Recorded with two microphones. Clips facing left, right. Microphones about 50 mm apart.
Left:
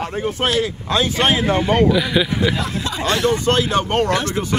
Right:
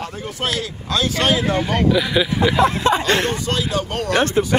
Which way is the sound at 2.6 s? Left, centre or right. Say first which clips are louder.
Right 7 dB; right.